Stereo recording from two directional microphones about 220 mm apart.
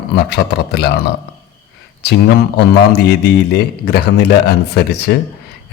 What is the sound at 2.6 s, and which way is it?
A man's voice, 45° left (ahead or behind).